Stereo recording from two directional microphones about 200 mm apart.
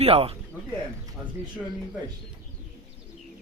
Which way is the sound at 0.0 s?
30° right (ahead or behind).